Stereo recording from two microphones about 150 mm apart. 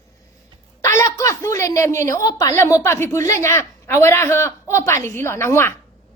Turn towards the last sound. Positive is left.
turn(degrees=15)  # may be behind; listen again after turning